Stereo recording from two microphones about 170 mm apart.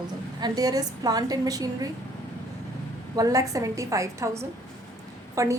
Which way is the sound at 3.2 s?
20° right (ahead or behind).